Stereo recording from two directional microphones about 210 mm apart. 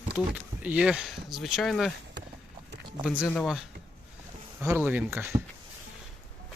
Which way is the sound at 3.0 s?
5° right (ahead or behind).